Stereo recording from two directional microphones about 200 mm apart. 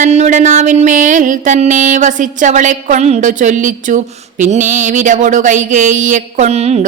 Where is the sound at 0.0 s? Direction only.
35° right (ahead or behind).